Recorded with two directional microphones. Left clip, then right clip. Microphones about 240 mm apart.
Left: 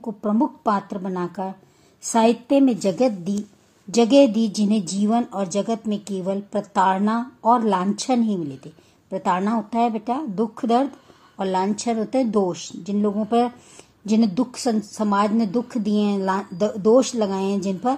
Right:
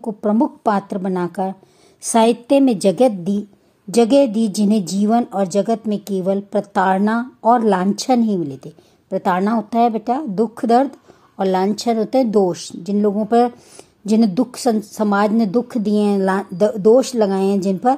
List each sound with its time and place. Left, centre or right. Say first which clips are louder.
0.0 s a woman's voice: right 5 dB; right